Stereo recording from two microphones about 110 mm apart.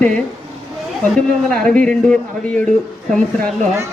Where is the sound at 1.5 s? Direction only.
10° left (ahead or behind).